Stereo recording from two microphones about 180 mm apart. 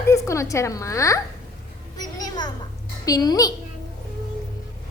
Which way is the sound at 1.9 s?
20° left (ahead or behind).